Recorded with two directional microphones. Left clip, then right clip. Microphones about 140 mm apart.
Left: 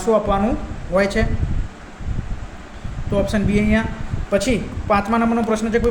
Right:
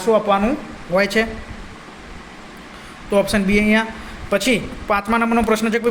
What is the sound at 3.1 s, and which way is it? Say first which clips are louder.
Speech: right 4 dB; 25° right (ahead or behind).